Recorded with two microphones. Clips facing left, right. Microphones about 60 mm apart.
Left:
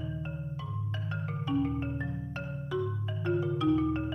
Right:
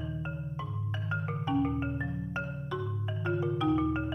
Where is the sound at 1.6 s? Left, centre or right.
Centre.